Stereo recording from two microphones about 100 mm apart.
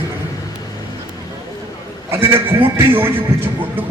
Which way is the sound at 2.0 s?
25° right (ahead or behind).